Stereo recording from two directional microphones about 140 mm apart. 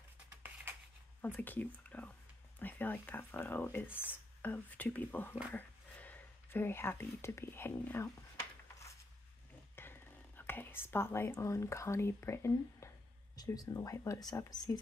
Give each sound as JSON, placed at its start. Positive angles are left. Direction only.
{"t": 1.2, "sound": "speech", "side_deg": 15}
{"t": 8.4, "sound": "a sound", "side_deg": 20}
{"t": 9.8, "sound": "speech", "side_deg": 15}